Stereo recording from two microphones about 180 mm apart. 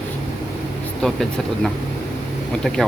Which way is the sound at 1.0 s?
Centre (ahead or behind).